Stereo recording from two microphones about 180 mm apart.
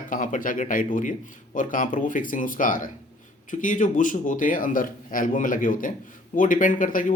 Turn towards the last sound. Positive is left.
turn(degrees=50)  # may be behind; listen again after turning